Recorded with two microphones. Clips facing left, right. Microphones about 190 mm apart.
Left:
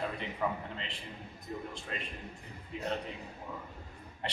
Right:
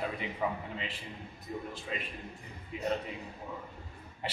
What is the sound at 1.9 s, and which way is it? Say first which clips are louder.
Speech: right 2 dB; 5° right (ahead or behind).